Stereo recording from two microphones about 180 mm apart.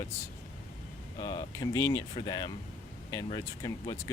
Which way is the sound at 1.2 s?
25° left (ahead or behind).